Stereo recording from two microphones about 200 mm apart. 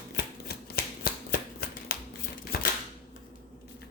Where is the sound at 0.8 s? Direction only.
50° left (ahead or behind).